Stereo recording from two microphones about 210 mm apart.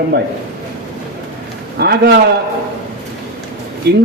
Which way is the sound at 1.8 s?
50° right (ahead or behind).